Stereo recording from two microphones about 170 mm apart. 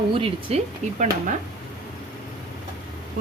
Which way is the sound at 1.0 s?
50° right (ahead or behind).